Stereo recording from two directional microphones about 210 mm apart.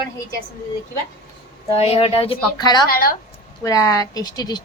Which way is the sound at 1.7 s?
30° left (ahead or behind).